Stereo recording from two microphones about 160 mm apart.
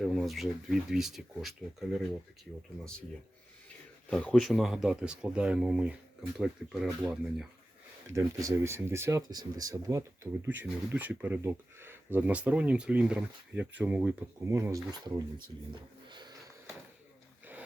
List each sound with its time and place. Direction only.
0.0 s speech: centre (ahead or behind)
4.1 s speech: 5° left (ahead or behind)
8.1 s speech: 20° right (ahead or behind)
15.7 s a sound: 30° right (ahead or behind)